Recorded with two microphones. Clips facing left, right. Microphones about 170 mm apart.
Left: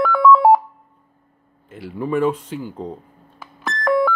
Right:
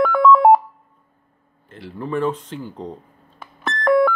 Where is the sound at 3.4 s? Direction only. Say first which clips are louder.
Right 1 dB; centre (ahead or behind).